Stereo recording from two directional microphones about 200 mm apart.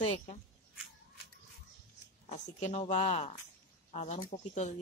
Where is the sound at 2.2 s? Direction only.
35° left (ahead or behind).